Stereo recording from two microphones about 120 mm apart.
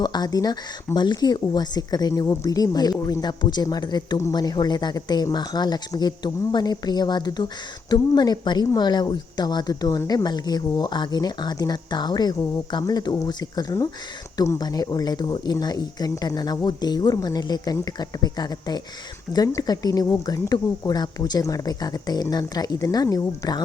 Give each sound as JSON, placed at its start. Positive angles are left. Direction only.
{"t": 0.0, "sound": "a woman's voice", "side_deg": 35}